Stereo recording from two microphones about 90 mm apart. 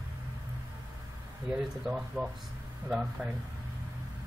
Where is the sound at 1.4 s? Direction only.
5° right (ahead or behind).